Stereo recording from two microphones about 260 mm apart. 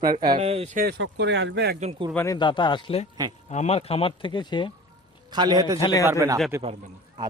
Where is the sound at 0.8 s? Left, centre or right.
Right.